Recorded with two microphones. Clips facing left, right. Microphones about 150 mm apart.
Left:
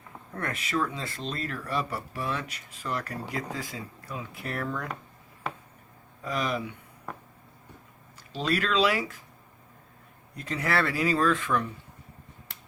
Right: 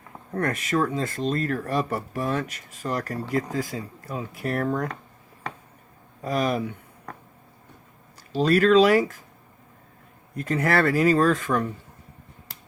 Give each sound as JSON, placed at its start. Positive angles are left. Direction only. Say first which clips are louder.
{"t": 0.3, "sound": "speech", "louder": "right 6 dB", "side_deg": -45}
{"t": 6.2, "sound": "speech", "louder": "right 6 dB", "side_deg": -40}
{"t": 8.3, "sound": "speech", "louder": "right 10 dB", "side_deg": -45}
{"t": 10.3, "sound": "speech", "louder": "right 6 dB", "side_deg": -50}